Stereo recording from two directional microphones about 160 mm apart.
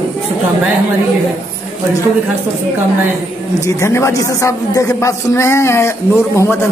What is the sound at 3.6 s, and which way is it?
Speech, 20° left (ahead or behind).